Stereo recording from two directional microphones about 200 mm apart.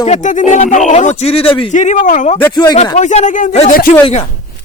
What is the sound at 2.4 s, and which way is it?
Speech, 20° left (ahead or behind).